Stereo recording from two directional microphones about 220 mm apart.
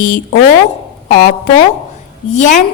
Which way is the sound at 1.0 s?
35° left (ahead or behind).